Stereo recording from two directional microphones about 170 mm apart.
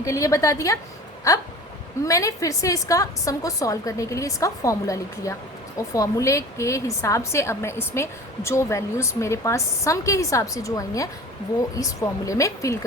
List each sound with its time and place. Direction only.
0.0 s a woman's voice: 20° left (ahead or behind)